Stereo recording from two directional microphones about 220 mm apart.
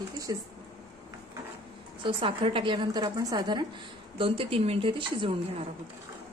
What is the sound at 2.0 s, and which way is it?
A woman's voice, 25° right (ahead or behind).